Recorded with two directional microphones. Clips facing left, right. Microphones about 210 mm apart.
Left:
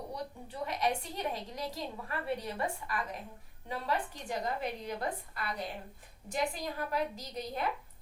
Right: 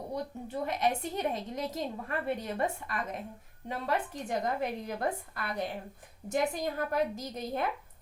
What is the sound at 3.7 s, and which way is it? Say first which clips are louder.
A woman's voice: right 2 dB; 50° right (ahead or behind).